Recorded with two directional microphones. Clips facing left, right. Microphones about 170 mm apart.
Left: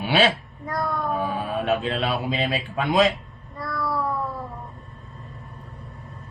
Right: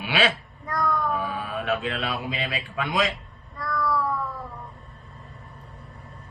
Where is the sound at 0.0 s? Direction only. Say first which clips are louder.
Left 4 dB; 35° left (ahead or behind).